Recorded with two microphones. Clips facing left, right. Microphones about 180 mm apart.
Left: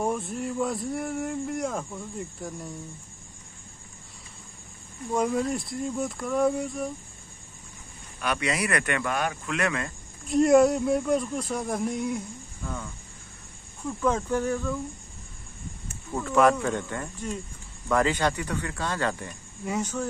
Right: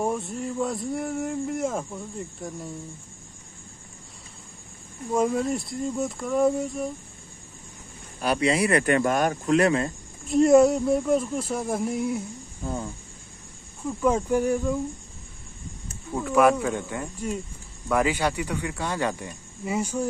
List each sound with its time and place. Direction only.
0.0 s speech: centre (ahead or behind)
5.1 s speech: centre (ahead or behind)
8.2 s speech: 35° right (ahead or behind)
10.2 s speech: centre (ahead or behind)
12.6 s speech: 30° right (ahead or behind)
13.8 s speech: 10° right (ahead or behind)
16.1 s speech: 10° right (ahead or behind)